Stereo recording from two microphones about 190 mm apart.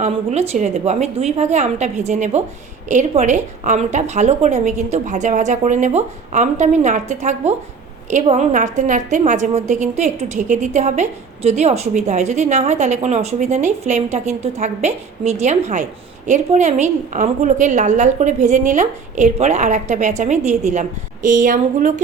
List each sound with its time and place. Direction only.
0.0 s a woman's voice: 35° right (ahead or behind)